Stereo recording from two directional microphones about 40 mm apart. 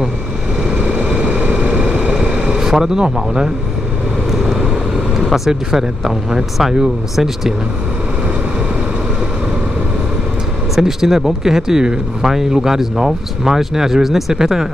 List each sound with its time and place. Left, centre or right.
0.7 s vehicle: right
1.2 s vehicle: right
2.5 s vehicle: centre
4.3 s vehicle: centre
5.5 s speech: centre
10.8 s speech: centre